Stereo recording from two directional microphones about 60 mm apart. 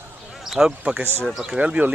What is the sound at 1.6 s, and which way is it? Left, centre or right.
Speech, right.